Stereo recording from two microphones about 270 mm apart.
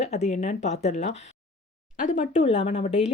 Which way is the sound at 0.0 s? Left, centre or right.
Left.